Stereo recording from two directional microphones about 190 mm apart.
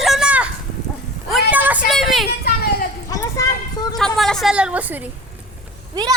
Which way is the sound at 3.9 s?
Centre (ahead or behind).